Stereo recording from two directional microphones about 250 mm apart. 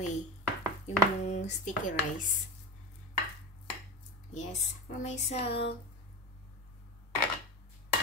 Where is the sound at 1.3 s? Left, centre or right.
Left.